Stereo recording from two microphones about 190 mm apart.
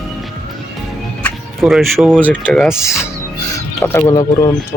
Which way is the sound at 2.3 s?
5° left (ahead or behind).